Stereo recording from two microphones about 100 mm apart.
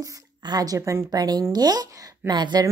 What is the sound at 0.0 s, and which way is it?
Speech, 40° right (ahead or behind).